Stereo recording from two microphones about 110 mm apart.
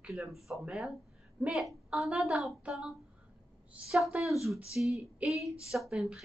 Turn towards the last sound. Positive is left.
turn(degrees=-5)  # may be behind; listen again after turning